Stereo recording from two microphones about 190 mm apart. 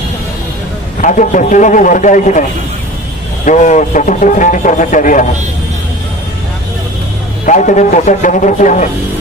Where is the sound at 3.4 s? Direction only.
40° left (ahead or behind).